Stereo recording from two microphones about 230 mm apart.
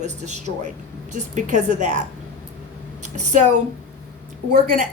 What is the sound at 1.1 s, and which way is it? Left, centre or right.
Speech, right.